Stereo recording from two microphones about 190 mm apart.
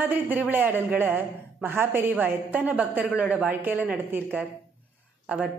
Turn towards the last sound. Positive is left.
turn(degrees=-5)  # may be behind; listen again after turning